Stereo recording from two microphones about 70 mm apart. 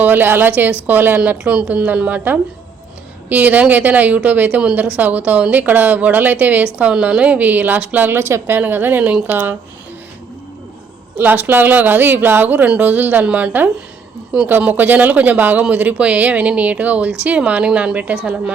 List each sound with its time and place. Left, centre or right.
0.0 s a woman's voice: right
1.2 s a woman's voice: centre
11.2 s a woman's voice: right